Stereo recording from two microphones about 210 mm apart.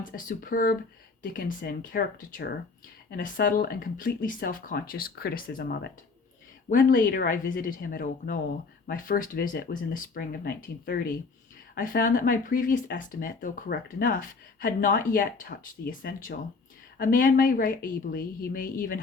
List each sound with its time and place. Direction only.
0.0 s speech: 40° left (ahead or behind)